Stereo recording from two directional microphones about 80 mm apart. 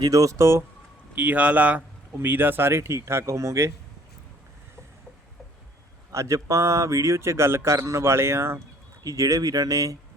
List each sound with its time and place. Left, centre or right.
0.1 s speech: right
1.1 s speech: centre; by 3.7 s right
6.1 s speech: right
9.0 s speech: right